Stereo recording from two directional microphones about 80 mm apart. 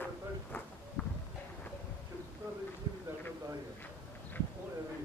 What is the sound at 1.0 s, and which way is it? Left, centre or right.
Clip-clop, centre.